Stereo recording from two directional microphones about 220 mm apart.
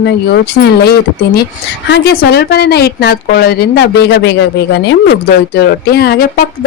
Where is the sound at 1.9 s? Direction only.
45° left (ahead or behind).